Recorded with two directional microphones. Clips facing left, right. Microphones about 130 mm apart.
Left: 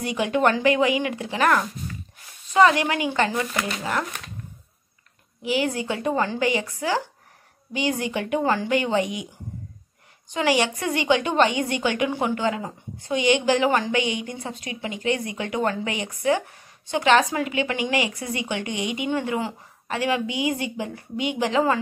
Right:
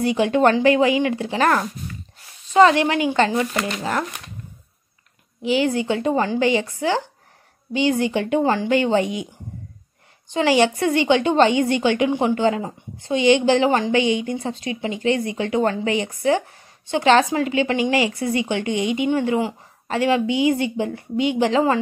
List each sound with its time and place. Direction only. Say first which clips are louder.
0.0 s a woman's voice: right 5 dB; 30° right (ahead or behind)
5.4 s a woman's voice: right 5 dB; 25° right (ahead or behind)
10.3 s a woman's voice: right 5 dB; 30° right (ahead or behind)